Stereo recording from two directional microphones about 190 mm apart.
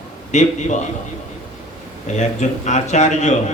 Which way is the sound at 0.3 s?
40° left (ahead or behind).